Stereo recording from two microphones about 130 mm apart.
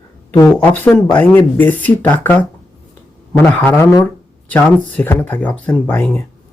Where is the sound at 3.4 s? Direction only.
10° left (ahead or behind).